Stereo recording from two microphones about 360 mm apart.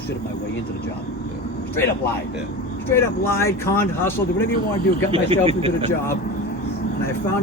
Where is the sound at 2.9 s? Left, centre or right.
Centre.